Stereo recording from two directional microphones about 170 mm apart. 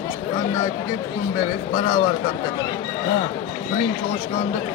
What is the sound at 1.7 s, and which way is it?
Speech, 25° left (ahead or behind).